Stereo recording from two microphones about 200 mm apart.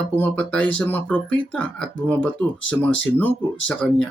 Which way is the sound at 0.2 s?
5° left (ahead or behind).